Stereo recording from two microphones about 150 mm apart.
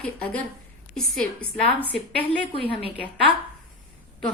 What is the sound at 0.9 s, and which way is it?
Speech, 5° left (ahead or behind).